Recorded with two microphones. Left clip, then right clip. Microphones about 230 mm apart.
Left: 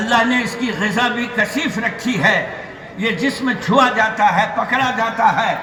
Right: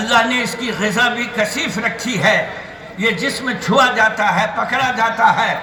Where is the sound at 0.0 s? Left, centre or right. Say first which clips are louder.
Right 1 dB; right.